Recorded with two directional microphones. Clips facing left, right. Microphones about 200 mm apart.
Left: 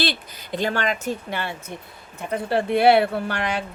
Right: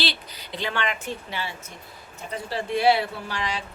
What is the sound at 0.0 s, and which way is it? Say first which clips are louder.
Speech: left 5 dB; 50° left (ahead or behind).